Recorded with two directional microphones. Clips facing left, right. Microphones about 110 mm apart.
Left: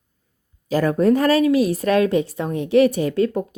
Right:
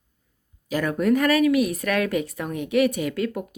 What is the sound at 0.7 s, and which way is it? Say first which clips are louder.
Speech: left 5 dB; 35° left (ahead or behind).